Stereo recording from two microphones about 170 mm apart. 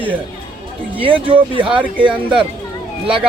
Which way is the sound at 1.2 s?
30° right (ahead or behind).